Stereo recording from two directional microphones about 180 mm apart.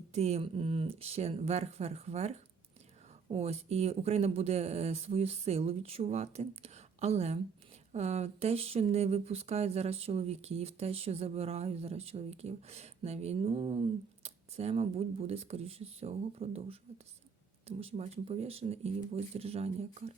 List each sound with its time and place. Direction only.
0.1 s speech: 35° right (ahead or behind)